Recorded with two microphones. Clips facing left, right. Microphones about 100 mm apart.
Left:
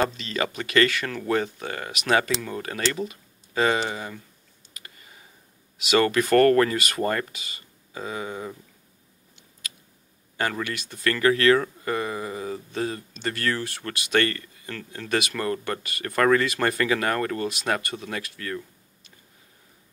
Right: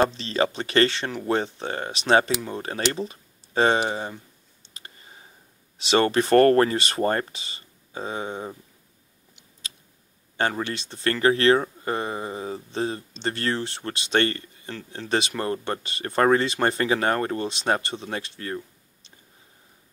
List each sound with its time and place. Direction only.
0.1 s speech: 30° right (ahead or behind)
4.7 s a sound: 30° right (ahead or behind)
5.8 s speech: 30° right (ahead or behind)
10.3 s speech: 25° right (ahead or behind)